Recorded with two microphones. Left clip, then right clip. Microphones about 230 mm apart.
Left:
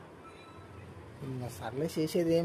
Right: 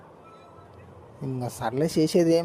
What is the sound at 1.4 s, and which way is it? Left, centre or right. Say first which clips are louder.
Speech: right 10 dB; right.